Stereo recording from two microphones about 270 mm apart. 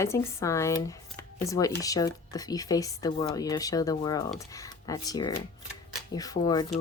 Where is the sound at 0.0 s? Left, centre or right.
Centre.